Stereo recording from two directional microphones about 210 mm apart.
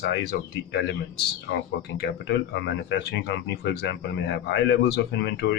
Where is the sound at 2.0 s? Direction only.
55° left (ahead or behind).